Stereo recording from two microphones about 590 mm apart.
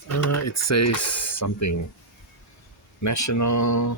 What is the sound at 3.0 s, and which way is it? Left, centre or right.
Speech, left.